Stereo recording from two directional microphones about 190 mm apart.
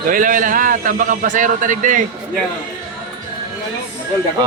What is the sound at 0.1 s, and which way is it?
A man's voice, 45° right (ahead or behind).